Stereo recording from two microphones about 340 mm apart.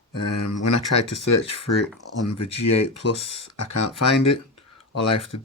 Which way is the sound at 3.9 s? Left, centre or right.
Centre.